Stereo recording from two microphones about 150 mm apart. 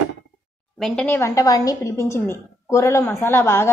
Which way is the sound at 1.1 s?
20° left (ahead or behind).